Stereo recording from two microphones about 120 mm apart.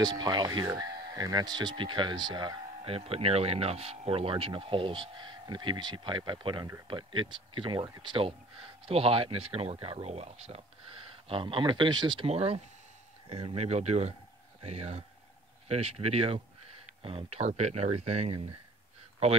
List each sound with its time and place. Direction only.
0.0 s speech: 35° right (ahead or behind)
2.8 s speech: 55° right (ahead or behind)
12.3 s speech: 60° right (ahead or behind)